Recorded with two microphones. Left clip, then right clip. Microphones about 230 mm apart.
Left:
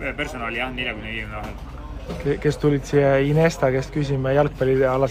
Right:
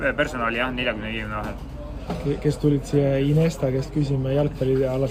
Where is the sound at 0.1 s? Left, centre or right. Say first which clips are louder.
Right 4 dB; centre.